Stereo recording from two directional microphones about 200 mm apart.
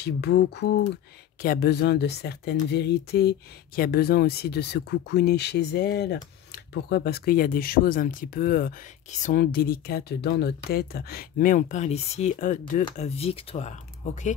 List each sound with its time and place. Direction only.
0.0 s a sound: 55° left (ahead or behind)
1.4 s speech: 50° left (ahead or behind)
12.9 s speech: 30° left (ahead or behind)